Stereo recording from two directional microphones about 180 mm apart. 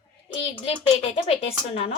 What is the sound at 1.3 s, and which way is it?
Speech, 35° left (ahead or behind).